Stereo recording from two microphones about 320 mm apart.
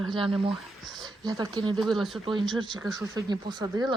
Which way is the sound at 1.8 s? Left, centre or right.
Centre.